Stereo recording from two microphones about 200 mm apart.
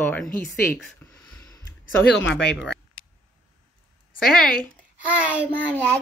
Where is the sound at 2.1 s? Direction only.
60° left (ahead or behind).